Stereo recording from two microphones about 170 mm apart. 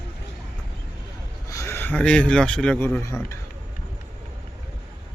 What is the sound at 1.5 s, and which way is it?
A man's voice, 15° left (ahead or behind).